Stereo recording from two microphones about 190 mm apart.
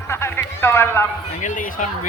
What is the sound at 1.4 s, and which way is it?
Speech, 40° left (ahead or behind).